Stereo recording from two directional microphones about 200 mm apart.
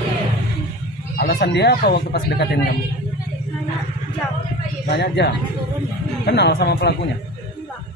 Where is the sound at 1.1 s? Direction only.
50° left (ahead or behind).